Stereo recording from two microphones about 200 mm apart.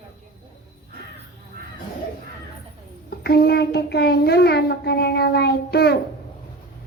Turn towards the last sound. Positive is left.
turn(degrees=55)  # may be behind; listen again after turning